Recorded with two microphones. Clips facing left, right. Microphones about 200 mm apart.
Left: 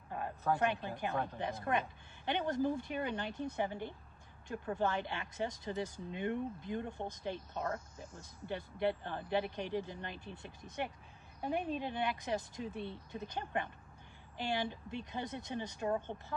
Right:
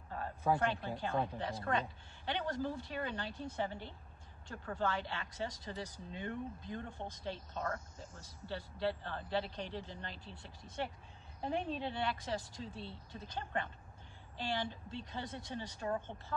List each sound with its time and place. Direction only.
0.1 s a sound: 20° left (ahead or behind)
0.6 s a woman's voice: 15° left (ahead or behind)
11.4 s a woman's voice: 10° left (ahead or behind)